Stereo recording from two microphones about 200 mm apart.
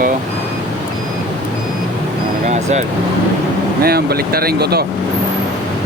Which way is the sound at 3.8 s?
50° right (ahead or behind).